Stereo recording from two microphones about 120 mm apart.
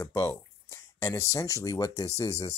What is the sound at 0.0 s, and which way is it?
Speech, 25° left (ahead or behind).